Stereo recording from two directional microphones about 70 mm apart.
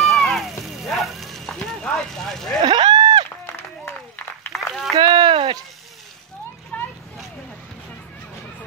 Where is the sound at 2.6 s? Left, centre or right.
Right.